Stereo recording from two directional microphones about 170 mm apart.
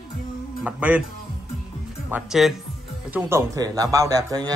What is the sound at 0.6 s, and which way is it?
Speech, 10° right (ahead or behind).